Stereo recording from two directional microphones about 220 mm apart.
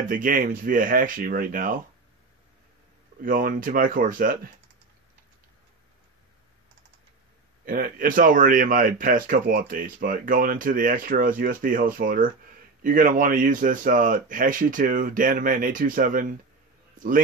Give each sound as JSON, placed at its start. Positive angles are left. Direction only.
{"t": 0.0, "sound": "speech", "side_deg": -40}
{"t": 3.2, "sound": "speech", "side_deg": -40}
{"t": 7.6, "sound": "speech", "side_deg": -40}